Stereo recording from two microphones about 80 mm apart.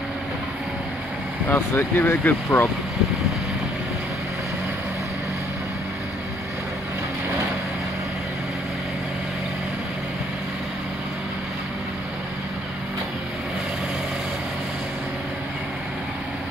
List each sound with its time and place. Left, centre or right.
1.5 s speech: left